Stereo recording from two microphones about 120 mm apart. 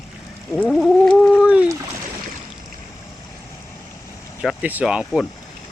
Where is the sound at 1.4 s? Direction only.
10° right (ahead or behind).